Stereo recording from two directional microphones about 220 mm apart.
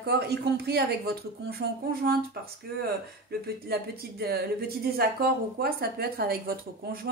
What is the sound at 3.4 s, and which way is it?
Speech, 45° right (ahead or behind).